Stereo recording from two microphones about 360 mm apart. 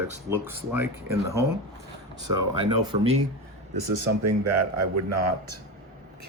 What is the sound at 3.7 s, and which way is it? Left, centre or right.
A man's voice, right.